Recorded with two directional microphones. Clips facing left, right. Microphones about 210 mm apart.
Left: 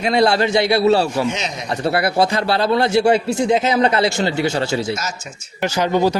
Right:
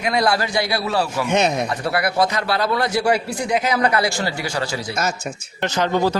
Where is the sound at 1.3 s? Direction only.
60° right (ahead or behind).